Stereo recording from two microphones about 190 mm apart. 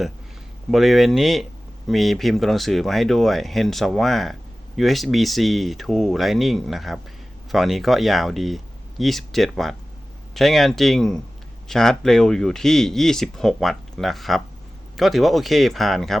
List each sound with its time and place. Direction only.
0.7 s speech: centre (ahead or behind)